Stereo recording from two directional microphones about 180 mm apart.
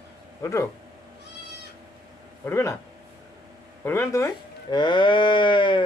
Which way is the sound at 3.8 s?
15° left (ahead or behind).